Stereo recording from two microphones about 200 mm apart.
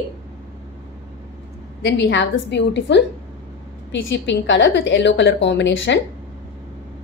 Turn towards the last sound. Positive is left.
turn(degrees=65)  # may be behind; listen again after turning